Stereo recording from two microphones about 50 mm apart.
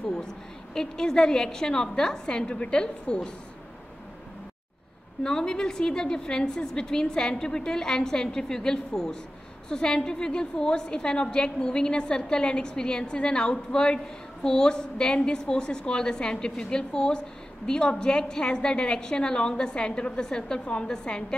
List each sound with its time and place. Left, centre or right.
0.0 s a woman's voice: centre
5.2 s a woman's voice: centre